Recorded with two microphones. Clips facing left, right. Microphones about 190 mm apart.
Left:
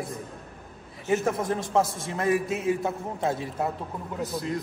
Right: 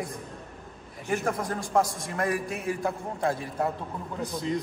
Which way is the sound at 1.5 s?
25° left (ahead or behind).